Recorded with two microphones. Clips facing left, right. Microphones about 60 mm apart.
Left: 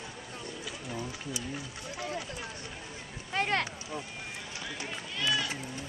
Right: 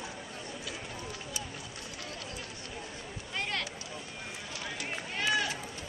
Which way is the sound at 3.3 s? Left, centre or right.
Left.